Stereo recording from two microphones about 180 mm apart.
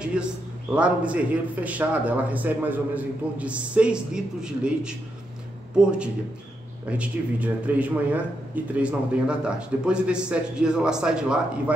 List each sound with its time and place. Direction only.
0.7 s a man's voice: 5° right (ahead or behind)